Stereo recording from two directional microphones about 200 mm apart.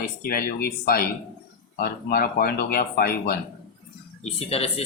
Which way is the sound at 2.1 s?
45° left (ahead or behind).